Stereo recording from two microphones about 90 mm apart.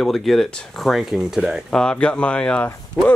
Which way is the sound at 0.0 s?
5° left (ahead or behind).